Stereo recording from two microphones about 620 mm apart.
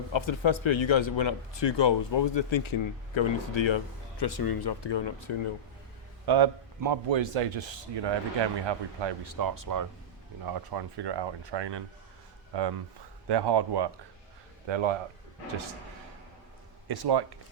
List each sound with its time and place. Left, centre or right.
0.1 s speech: left
6.2 s speech: right
7.2 s speech: right
16.9 s speech: right